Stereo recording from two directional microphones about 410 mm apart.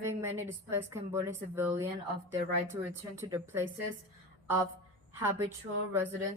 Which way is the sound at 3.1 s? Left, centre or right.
Centre.